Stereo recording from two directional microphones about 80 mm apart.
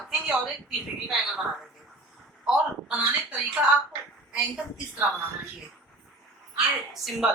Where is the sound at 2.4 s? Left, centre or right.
Centre.